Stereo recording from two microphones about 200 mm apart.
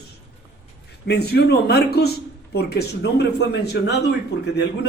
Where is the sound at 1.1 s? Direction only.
55° left (ahead or behind).